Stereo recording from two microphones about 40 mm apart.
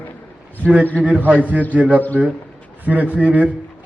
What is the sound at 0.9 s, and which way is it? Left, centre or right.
A man's voice, right.